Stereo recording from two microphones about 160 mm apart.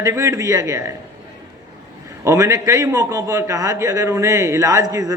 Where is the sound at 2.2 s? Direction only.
20° right (ahead or behind).